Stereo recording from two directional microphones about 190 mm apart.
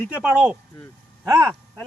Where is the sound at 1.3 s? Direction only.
15° right (ahead or behind).